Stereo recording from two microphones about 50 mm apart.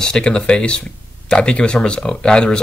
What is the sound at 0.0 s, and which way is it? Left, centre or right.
Speech, centre.